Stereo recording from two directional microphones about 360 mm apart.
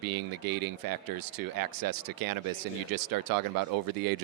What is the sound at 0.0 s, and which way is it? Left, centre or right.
Speech, right.